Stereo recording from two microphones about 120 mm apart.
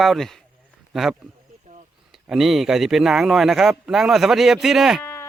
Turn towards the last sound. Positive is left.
turn(degrees=-5)  # may be behind; listen again after turning